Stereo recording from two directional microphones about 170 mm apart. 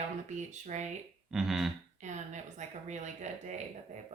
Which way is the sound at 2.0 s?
45° right (ahead or behind).